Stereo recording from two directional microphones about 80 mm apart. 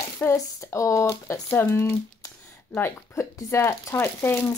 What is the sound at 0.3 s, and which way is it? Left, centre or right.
Speech, left.